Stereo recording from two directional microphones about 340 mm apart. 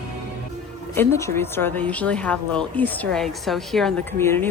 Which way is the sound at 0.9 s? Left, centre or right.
Centre.